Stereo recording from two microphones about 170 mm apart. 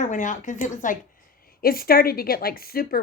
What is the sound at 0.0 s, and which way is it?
Speech, 45° left (ahead or behind).